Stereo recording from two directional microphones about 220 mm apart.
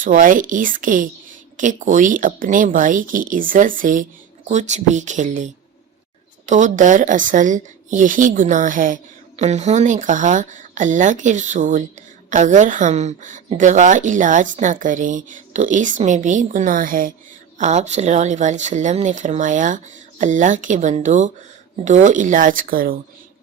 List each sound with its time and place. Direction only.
0.0 s a woman's voice: 35° right (ahead or behind)